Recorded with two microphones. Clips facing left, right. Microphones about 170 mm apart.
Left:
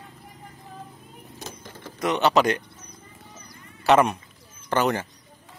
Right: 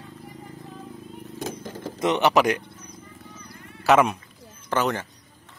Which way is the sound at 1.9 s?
20° right (ahead or behind).